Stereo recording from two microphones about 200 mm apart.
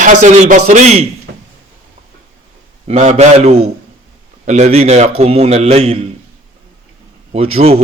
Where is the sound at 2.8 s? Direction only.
35° right (ahead or behind).